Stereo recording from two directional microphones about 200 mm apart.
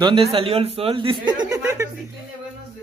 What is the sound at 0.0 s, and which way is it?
Speech, 25° right (ahead or behind).